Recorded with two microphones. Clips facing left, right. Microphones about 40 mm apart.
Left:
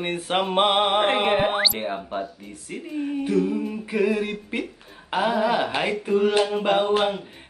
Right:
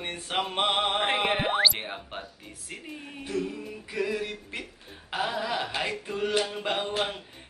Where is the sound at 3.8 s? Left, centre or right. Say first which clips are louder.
Left 6 dB; left.